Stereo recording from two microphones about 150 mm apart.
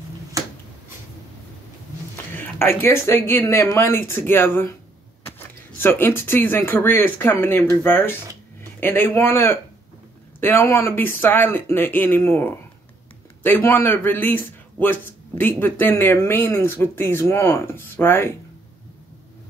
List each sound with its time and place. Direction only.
2.3 s a man's voice: 15° left (ahead or behind)
5.8 s a man's voice: 15° left (ahead or behind)